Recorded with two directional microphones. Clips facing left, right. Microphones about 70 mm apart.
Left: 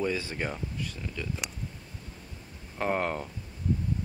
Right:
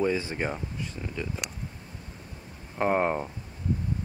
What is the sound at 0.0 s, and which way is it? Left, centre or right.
Speech, right.